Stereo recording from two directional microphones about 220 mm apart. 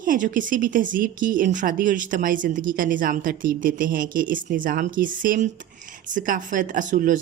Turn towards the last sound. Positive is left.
turn(degrees=-35)  # may be behind; listen again after turning